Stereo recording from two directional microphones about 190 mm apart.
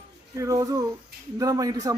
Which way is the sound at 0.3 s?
15° right (ahead or behind).